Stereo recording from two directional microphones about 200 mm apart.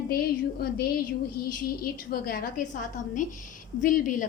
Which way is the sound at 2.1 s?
45° left (ahead or behind).